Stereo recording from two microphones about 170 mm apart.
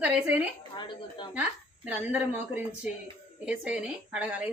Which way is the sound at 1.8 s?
10° right (ahead or behind).